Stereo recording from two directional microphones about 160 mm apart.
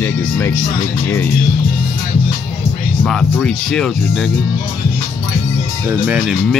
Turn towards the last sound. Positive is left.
turn(degrees=-10)  # may be behind; listen again after turning